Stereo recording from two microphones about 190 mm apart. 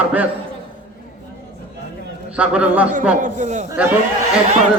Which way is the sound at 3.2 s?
40° right (ahead or behind).